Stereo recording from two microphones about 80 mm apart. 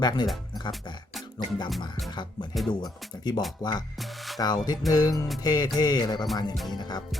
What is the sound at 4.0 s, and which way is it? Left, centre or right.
Music, centre.